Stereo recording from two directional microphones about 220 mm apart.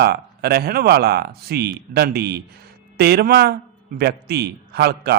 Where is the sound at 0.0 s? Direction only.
45° right (ahead or behind).